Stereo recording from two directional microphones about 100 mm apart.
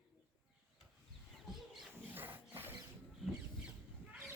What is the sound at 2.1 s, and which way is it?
Wild animals, 20° right (ahead or behind).